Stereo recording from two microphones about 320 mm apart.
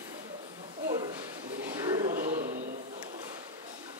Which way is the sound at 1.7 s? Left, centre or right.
Centre.